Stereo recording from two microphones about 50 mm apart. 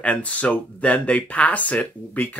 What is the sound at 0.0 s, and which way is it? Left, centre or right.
Speech, left.